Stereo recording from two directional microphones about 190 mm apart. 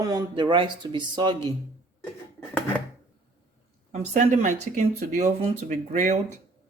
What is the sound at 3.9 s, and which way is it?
Speech, 40° right (ahead or behind).